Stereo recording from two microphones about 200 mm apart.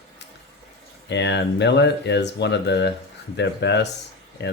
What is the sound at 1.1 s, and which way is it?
Speech, 60° left (ahead or behind).